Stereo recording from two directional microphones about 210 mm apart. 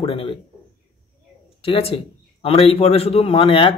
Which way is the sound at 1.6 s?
25° left (ahead or behind).